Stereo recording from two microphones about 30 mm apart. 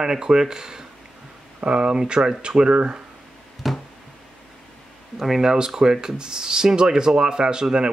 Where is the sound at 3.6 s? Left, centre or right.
Centre.